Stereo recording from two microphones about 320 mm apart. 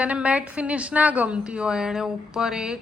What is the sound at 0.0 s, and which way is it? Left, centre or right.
A woman's voice, centre.